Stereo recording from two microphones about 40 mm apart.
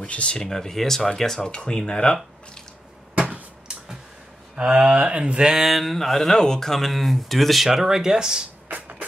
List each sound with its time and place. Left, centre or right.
0.0 s speech: left
0.4 s speech: centre
3.2 s a sound: right
4.6 s speech: right
5.5 s speech: centre
8.6 s music: right